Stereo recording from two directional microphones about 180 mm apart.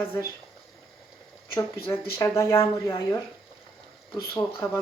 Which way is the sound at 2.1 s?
15° left (ahead or behind).